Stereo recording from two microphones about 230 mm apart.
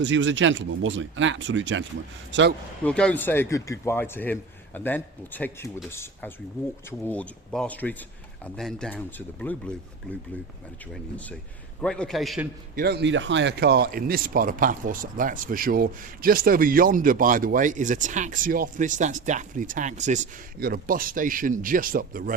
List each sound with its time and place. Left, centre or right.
0.0 s speech: right
2.8 s a man's voice: centre
11.8 s a man's voice: centre
12.7 s speech: right